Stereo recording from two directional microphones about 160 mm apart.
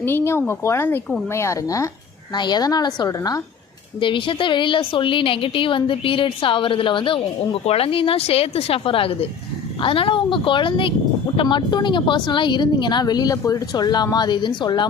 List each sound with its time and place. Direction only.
0.0 s a woman's voice: 15° left (ahead or behind)